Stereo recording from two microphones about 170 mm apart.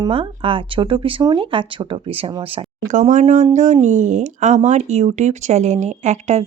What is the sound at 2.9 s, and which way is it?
Speech, 45° right (ahead or behind).